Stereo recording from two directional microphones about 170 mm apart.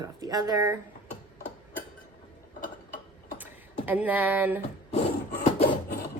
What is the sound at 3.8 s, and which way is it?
Speech, 10° right (ahead or behind).